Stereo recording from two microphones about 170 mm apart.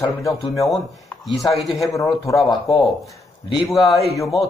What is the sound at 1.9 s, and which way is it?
Speech, 20° left (ahead or behind).